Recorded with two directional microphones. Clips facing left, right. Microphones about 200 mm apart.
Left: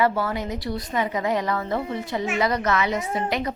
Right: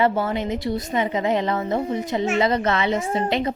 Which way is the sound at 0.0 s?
25° right (ahead or behind).